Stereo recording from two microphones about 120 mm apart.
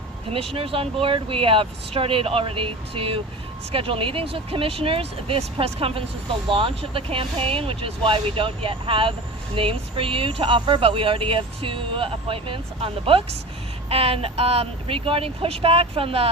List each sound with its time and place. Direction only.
0.3 s speech: 55° right (ahead or behind)